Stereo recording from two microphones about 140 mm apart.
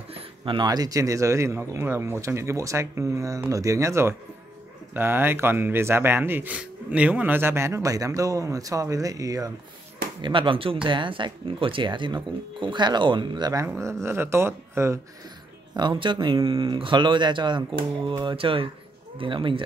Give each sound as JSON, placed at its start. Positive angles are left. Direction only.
{"t": 0.1, "sound": "speech", "side_deg": -35}
{"t": 10.2, "sound": "speech", "side_deg": -35}
{"t": 15.7, "sound": "speech", "side_deg": -35}